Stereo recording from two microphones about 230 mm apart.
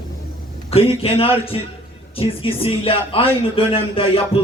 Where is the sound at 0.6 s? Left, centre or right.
Left.